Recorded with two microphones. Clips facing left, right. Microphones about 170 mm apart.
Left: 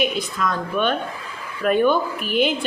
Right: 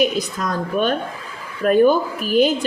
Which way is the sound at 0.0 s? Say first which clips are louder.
Right 3 dB; 40° right (ahead or behind).